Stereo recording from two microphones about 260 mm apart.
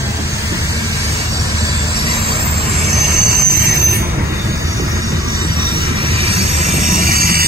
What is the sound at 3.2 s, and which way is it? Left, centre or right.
Train, right.